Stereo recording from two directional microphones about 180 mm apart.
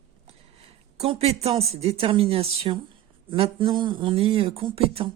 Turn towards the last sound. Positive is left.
turn(degrees=-35)  # may be behind; listen again after turning